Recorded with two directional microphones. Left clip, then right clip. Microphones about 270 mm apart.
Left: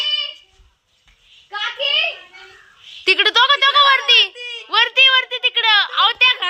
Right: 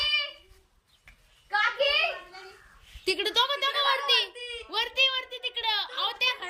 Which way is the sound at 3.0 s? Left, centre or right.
Centre.